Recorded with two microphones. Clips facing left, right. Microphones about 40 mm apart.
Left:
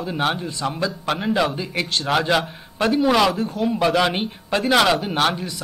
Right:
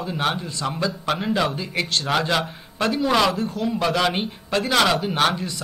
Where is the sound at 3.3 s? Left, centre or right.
Left.